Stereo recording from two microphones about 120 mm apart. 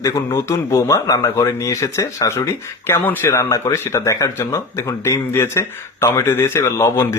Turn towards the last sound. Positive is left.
turn(degrees=20)  # may be behind; listen again after turning